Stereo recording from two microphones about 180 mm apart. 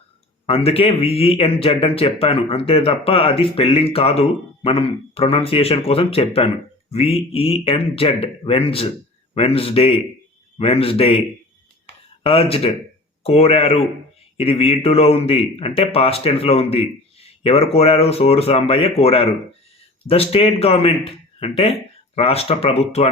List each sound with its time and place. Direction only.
0.4 s speech: 35° left (ahead or behind)
12.2 s speech: 30° left (ahead or behind)